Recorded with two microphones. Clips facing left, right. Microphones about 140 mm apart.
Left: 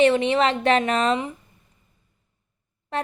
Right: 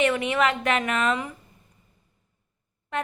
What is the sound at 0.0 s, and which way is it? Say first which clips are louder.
Speech: left 4 dB; 30° left (ahead or behind).